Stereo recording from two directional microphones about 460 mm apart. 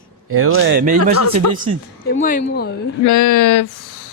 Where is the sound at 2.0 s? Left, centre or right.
Centre.